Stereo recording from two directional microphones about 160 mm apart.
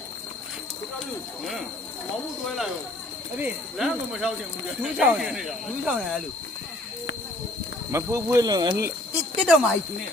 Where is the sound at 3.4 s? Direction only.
Centre (ahead or behind).